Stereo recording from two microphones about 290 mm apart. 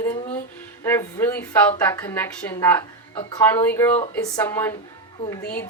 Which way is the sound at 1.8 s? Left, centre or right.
Centre.